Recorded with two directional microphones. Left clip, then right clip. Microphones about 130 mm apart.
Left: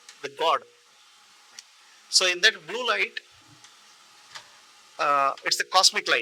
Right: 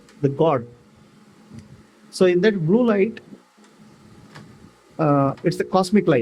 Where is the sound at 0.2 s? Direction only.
65° left (ahead or behind).